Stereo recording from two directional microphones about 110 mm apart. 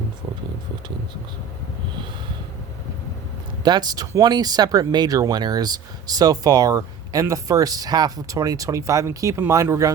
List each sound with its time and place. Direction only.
3.6 s speech: 40° right (ahead or behind)